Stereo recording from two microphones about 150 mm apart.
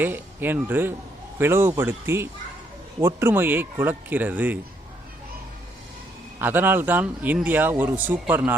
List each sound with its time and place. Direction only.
0.0 s speech: 15° right (ahead or behind)
6.4 s speech: 15° right (ahead or behind)